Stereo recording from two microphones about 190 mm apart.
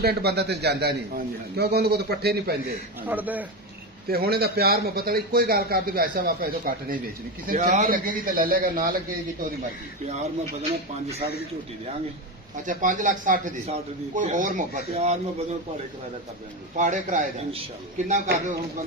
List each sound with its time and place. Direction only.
0.0 s a man's voice: 60° right (ahead or behind)
3.0 s a man's voice: 10° right (ahead or behind)
4.1 s speech: 55° right (ahead or behind)
10.7 s a man's voice: 35° right (ahead or behind)
12.6 s speech: 40° right (ahead or behind)
16.7 s a man's voice: 40° right (ahead or behind)